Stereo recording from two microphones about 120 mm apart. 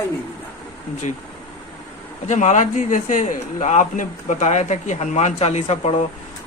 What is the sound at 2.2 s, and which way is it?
A man's voice, 90° left.